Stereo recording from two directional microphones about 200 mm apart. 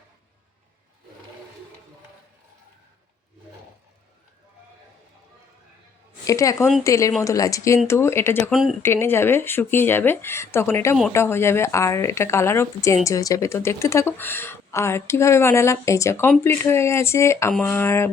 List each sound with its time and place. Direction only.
6.2 s speech: 15° left (ahead or behind)